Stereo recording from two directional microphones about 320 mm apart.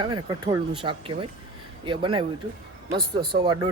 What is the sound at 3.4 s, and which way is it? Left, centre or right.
Speech, centre.